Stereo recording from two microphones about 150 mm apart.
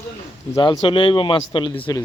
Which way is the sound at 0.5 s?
30° left (ahead or behind).